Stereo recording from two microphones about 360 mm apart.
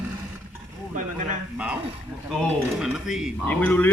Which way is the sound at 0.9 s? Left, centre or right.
Right.